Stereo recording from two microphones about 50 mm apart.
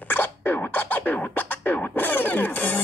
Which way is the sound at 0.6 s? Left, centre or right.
Left.